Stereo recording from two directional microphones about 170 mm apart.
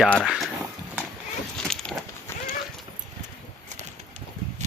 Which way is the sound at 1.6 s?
5° left (ahead or behind).